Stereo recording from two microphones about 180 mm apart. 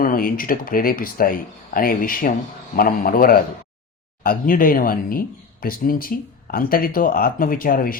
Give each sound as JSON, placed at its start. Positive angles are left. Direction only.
{"t": 0.0, "sound": "speech", "side_deg": 50}